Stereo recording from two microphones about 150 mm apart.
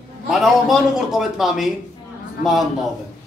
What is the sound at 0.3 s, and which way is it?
A man's voice, centre (ahead or behind).